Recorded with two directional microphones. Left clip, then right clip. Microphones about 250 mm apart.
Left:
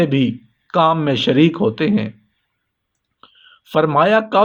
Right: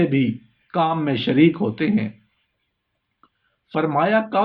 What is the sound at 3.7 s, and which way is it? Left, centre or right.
Speech, left.